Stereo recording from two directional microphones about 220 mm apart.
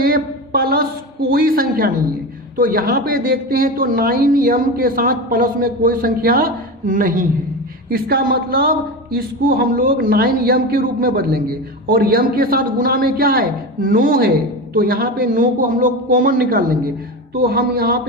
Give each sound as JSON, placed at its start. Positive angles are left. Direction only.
{"t": 0.0, "sound": "a woman's voice", "side_deg": -45}